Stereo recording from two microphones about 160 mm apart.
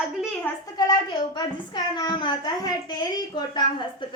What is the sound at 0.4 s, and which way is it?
A woman's voice, 20° left (ahead or behind).